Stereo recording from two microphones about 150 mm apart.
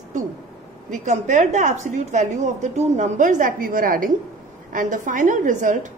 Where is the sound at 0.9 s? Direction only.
55° right (ahead or behind).